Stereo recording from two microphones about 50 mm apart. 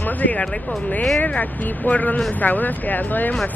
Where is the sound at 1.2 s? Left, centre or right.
Left.